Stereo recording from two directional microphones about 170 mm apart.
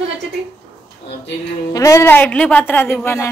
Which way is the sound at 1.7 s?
20° left (ahead or behind).